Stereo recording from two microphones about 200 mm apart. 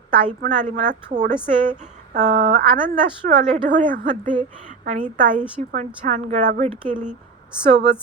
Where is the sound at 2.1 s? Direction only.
40° right (ahead or behind).